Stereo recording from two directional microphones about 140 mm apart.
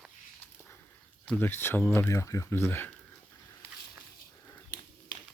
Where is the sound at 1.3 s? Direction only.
15° left (ahead or behind).